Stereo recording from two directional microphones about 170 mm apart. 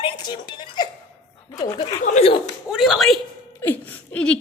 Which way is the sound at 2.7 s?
Centre (ahead or behind).